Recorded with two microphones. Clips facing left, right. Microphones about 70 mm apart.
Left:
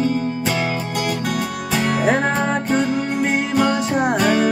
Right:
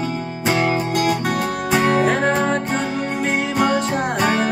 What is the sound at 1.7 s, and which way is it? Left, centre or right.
Music, right.